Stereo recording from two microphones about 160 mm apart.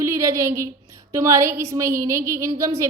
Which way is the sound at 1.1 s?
20° right (ahead or behind).